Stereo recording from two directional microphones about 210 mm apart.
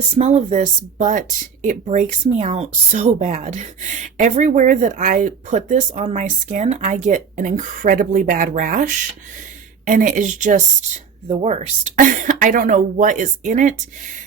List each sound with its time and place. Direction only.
0.2 s speech: 30° right (ahead or behind)